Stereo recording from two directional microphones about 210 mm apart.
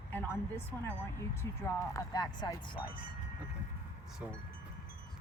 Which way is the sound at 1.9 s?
15° left (ahead or behind).